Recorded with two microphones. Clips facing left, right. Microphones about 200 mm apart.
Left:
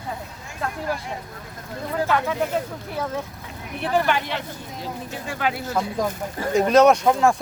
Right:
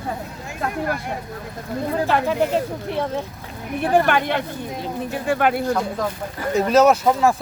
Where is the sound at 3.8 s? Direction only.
50° right (ahead or behind).